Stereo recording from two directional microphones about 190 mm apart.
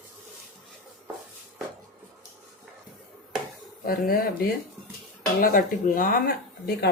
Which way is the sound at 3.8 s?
50° left (ahead or behind).